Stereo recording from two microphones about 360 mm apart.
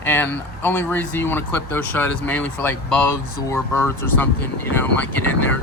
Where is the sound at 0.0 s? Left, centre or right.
Centre.